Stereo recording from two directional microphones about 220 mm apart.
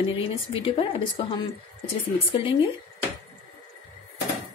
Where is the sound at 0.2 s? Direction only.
25° left (ahead or behind).